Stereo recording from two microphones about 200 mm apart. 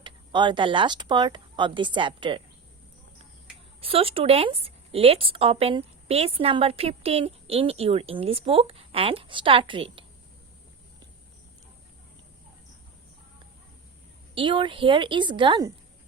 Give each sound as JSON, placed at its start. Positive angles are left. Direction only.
{"t": 0.0, "sound": "speech", "side_deg": -25}
{"t": 3.8, "sound": "a woman's voice", "side_deg": -30}
{"t": 14.3, "sound": "a woman's voice", "side_deg": -25}